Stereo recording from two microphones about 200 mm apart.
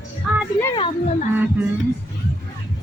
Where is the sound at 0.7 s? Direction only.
25° left (ahead or behind).